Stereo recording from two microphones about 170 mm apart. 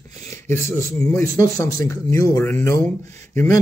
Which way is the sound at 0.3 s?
15° left (ahead or behind).